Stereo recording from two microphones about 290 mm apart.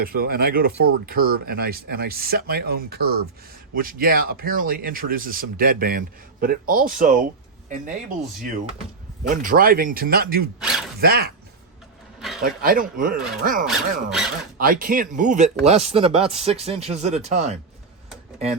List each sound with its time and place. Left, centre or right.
0.0 s speech: right
9.2 s speech: right
10.6 s speech: centre
11.0 s speech: right
12.4 s speech: right
13.7 s speech: centre
14.6 s speech: right